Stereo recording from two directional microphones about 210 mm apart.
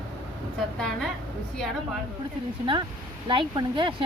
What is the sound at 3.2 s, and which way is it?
Speech, 20° right (ahead or behind).